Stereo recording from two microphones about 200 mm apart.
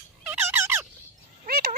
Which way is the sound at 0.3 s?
10° right (ahead or behind).